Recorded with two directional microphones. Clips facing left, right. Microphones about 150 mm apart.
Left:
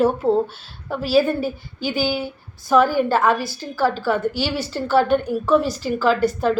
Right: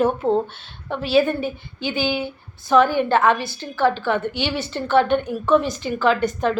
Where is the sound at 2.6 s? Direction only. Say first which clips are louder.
Even; 10° left (ahead or behind).